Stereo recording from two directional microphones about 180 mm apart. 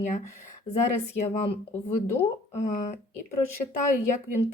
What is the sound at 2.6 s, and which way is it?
Speech, 40° left (ahead or behind).